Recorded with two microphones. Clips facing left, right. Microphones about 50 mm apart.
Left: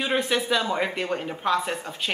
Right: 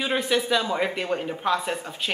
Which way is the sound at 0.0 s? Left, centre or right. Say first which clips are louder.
Even; centre.